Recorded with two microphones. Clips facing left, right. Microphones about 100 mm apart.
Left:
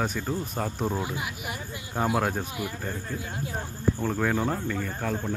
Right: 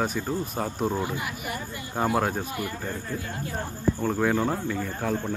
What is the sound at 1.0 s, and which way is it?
Speech, 15° left (ahead or behind).